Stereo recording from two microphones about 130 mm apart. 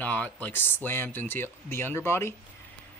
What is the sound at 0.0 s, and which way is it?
Speech, 10° left (ahead or behind).